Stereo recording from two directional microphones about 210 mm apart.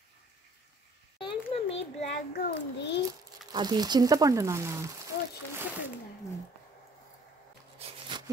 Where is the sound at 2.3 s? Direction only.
50° left (ahead or behind).